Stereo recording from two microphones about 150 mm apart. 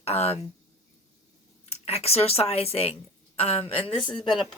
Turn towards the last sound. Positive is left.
turn(degrees=5)  # may be behind; listen again after turning